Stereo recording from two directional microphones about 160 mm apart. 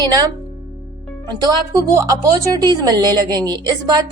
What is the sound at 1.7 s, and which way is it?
Speech, 20° right (ahead or behind).